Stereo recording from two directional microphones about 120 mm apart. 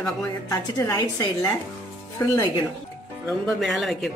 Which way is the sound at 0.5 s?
30° left (ahead or behind).